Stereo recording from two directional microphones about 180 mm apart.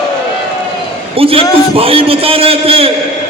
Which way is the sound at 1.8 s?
30° right (ahead or behind).